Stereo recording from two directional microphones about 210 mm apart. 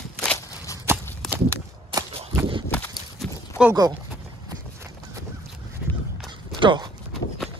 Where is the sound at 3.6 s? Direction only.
15° right (ahead or behind).